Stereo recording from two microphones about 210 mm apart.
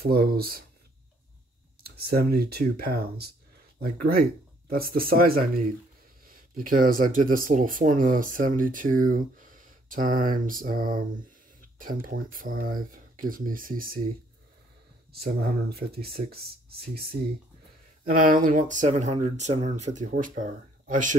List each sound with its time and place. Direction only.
0.0 s speech: 45° right (ahead or behind)
1.8 s speech: 45° right (ahead or behind)
6.6 s speech: 40° right (ahead or behind)
15.1 s speech: 45° right (ahead or behind)